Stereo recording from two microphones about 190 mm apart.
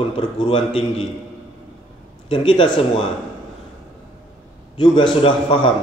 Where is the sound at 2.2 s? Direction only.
25° left (ahead or behind).